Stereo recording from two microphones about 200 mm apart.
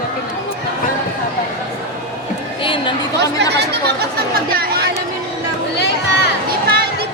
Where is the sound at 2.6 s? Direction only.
25° left (ahead or behind).